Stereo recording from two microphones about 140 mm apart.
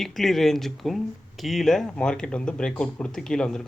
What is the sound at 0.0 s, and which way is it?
Speech, centre (ahead or behind).